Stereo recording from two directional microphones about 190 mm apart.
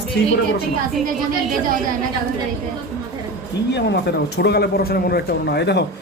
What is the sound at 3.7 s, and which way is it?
Speech, 65° left (ahead or behind).